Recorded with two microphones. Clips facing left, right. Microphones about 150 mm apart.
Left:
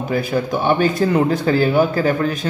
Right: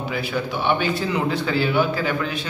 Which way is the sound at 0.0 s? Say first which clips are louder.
Left 6 dB; 45° left (ahead or behind).